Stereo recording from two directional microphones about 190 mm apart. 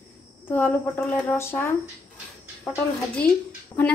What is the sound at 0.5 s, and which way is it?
Speech, 10° left (ahead or behind).